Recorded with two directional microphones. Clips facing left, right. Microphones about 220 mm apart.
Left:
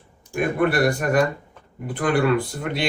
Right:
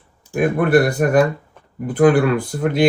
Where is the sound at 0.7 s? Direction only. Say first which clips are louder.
Right 6 dB; 50° right (ahead or behind).